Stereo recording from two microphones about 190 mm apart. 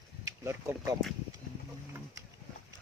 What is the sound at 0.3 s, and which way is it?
Speech, 15° right (ahead or behind).